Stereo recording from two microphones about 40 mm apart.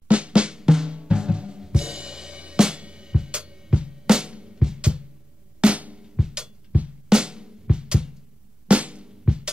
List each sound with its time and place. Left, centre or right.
0.1 s drum: right
0.9 s drum kit: right
3.6 s music: right
5.6 s drum: right
6.0 s drum: centre
6.7 s music: right
7.1 s drum: right
8.6 s music: right